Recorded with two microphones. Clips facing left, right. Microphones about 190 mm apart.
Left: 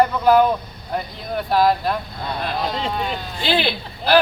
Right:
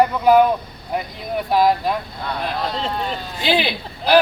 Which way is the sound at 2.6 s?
10° left (ahead or behind).